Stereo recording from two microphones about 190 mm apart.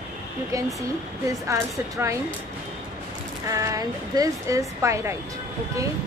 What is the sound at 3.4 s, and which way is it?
A woman's voice, 15° right (ahead or behind).